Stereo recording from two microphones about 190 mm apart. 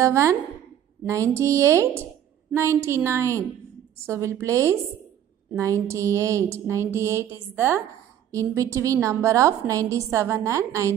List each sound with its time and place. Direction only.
0.0 s a woman's voice: 15° right (ahead or behind)